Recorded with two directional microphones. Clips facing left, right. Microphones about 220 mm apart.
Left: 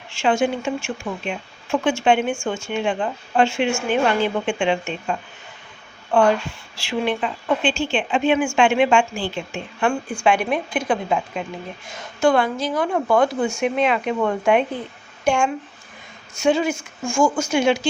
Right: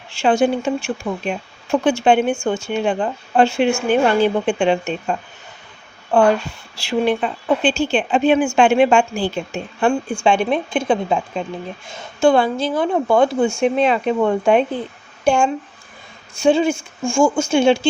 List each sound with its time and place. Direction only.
0.1 s a woman's voice: 35° right (ahead or behind)
6.1 s a woman's voice: 40° right (ahead or behind)
10.2 s speech: 25° right (ahead or behind)